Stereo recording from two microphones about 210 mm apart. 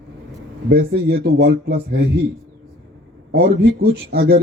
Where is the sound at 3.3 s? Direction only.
50° right (ahead or behind).